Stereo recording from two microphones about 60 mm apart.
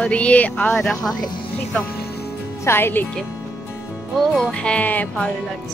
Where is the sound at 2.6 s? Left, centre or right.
Left.